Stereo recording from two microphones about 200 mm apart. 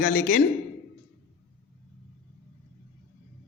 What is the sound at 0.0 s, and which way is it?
Speech, 45° left (ahead or behind).